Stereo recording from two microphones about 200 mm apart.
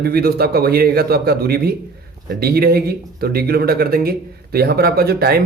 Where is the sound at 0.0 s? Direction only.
50° right (ahead or behind).